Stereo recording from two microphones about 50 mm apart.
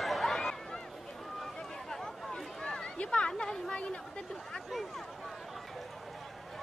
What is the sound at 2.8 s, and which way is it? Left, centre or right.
Chatter, left.